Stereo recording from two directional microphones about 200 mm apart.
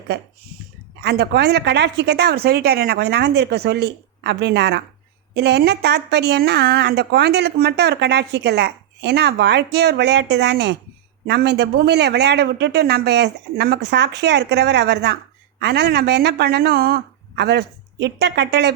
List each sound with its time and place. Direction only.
1.0 s speech: 55° right (ahead or behind)